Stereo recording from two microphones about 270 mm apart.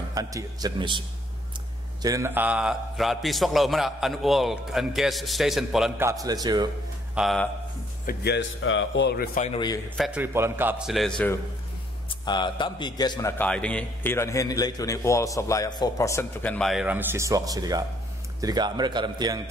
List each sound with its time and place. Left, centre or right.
0.1 s a man's voice: centre
7.2 s a man's voice: centre
8.1 s a man's voice: left; by 9.8 s centre
9.9 s a man's voice: centre
12.3 s a man's voice: centre